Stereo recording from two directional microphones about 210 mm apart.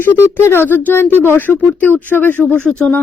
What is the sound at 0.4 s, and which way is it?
Speech, 10° left (ahead or behind).